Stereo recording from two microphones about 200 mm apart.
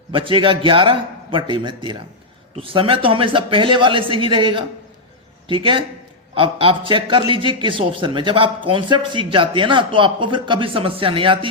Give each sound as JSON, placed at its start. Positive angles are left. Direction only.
{"t": 0.1, "sound": "a man's voice", "side_deg": -25}